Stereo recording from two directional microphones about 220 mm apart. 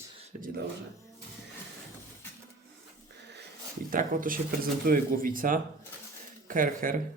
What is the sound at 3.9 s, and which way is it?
Speech, 40° right (ahead or behind).